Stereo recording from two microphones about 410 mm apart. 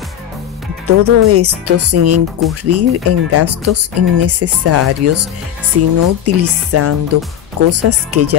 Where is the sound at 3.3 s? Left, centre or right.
Right.